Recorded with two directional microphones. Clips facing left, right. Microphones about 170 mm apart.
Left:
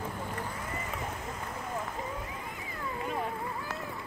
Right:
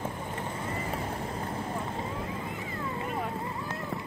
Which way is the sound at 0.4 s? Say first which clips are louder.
Right 3 dB; 25° right (ahead or behind).